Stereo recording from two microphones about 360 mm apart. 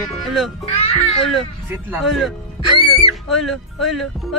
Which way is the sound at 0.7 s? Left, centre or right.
Centre.